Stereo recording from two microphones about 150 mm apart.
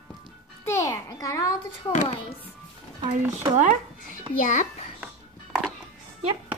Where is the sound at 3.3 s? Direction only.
55° right (ahead or behind).